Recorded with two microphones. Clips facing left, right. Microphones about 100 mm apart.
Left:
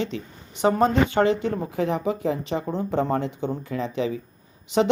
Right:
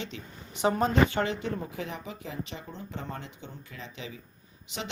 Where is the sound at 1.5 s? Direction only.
40° left (ahead or behind).